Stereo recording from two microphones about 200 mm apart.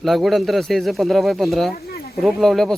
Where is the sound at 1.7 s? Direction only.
50° left (ahead or behind).